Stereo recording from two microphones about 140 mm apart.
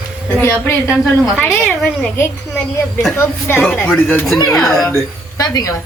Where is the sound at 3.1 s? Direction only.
15° left (ahead or behind).